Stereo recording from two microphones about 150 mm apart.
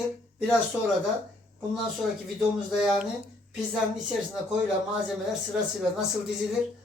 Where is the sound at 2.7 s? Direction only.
5° right (ahead or behind).